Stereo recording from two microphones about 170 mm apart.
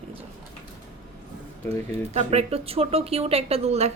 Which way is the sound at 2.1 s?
35° right (ahead or behind).